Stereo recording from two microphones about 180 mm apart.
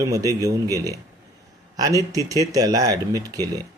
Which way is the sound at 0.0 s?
20° right (ahead or behind).